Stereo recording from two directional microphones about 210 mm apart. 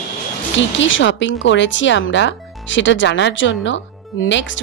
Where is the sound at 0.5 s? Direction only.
60° left (ahead or behind).